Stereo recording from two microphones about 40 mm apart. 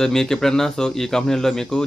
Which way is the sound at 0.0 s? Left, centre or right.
Centre.